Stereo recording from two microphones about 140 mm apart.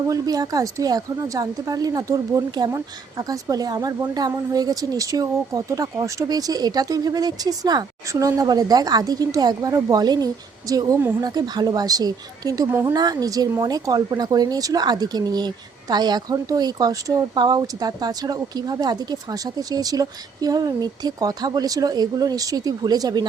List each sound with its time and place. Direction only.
0.1 s a woman's voice: 25° right (ahead or behind)